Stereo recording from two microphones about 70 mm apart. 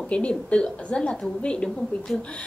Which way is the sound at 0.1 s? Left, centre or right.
Centre.